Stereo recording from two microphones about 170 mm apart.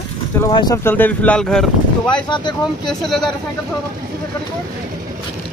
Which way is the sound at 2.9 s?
Centre (ahead or behind).